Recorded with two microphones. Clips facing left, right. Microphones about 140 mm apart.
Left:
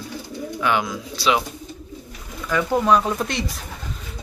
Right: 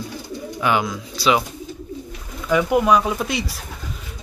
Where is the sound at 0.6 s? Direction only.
5° right (ahead or behind).